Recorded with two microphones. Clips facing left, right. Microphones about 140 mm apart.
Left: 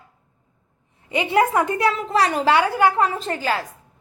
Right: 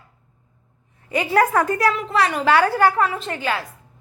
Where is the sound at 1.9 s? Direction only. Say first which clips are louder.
Left 1 dB; 35° left (ahead or behind).